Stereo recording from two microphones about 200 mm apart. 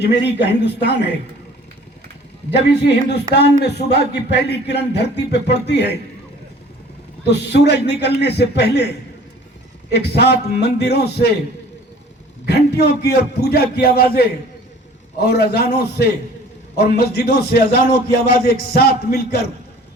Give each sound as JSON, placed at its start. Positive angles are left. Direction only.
{"t": 0.0, "sound": "speech", "side_deg": 60}
{"t": 2.5, "sound": "speech", "side_deg": 60}
{"t": 7.3, "sound": "speech", "side_deg": 55}
{"t": 9.9, "sound": "speech", "side_deg": 55}
{"t": 12.5, "sound": "a man's voice", "side_deg": 55}